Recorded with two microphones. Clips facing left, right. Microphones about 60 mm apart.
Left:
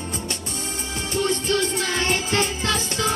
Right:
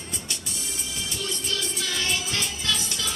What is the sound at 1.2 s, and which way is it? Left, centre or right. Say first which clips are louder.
Music: left 11 dB; left.